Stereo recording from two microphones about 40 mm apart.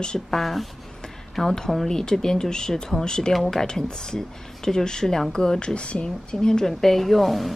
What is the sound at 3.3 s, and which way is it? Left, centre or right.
Speech, centre.